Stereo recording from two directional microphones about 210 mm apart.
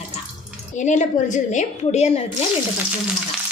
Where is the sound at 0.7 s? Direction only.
35° left (ahead or behind).